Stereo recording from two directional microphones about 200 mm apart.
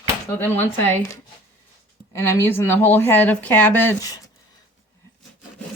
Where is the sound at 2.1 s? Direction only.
10° left (ahead or behind).